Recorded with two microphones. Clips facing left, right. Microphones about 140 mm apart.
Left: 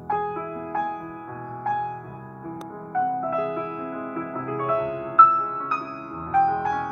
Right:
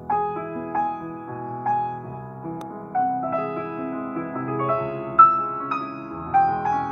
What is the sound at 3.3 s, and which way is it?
Music, centre (ahead or behind).